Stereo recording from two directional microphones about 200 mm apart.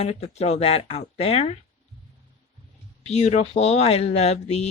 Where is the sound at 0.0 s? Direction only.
30° left (ahead or behind).